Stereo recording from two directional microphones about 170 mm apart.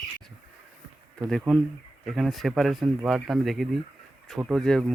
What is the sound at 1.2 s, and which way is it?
Speech, centre (ahead or behind).